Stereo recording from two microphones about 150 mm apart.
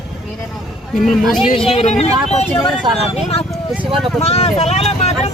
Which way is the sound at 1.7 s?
45° left (ahead or behind).